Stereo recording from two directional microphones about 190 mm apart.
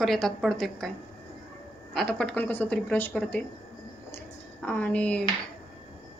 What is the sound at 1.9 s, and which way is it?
Speech, centre (ahead or behind).